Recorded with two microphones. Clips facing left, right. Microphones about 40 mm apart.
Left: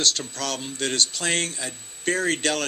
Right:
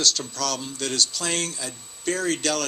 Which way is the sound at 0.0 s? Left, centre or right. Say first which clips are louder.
Right 1 dB; left.